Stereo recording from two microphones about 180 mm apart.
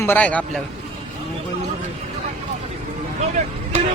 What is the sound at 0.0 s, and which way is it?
Speech, 10° left (ahead or behind).